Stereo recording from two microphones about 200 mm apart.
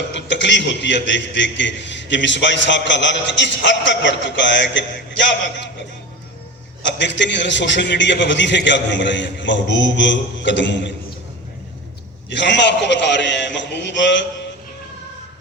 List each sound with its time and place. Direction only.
0.1 s a man's voice: 60° left (ahead or behind)
6.8 s a man's voice: 65° left (ahead or behind)
12.3 s a man's voice: 65° left (ahead or behind)